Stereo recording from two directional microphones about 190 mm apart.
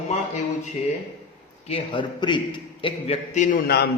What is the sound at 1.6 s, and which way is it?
A man's voice, 30° left (ahead or behind).